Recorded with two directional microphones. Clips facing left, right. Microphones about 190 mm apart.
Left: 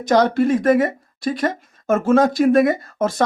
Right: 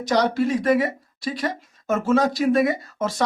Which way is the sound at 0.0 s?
50° left (ahead or behind).